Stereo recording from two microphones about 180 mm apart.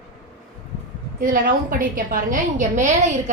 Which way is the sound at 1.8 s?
50° right (ahead or behind).